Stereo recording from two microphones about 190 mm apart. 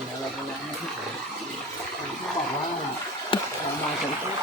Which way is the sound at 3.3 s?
25° left (ahead or behind).